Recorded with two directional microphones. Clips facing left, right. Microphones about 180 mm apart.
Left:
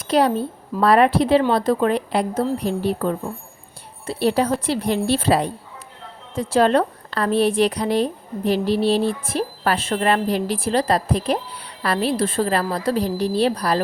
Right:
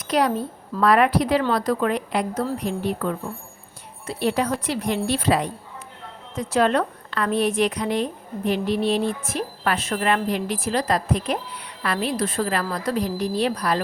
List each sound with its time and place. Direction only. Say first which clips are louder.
0.1 s a woman's voice: left 3 dB; 30° left (ahead or behind)